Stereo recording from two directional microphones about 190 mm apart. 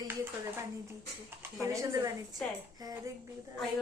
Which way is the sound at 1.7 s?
15° right (ahead or behind).